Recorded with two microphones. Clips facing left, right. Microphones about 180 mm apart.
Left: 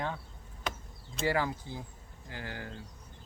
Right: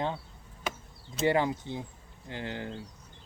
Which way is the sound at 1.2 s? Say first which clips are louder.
Right 4 dB; 25° right (ahead or behind).